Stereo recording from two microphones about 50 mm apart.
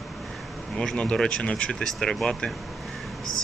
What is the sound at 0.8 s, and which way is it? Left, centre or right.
Speech, centre.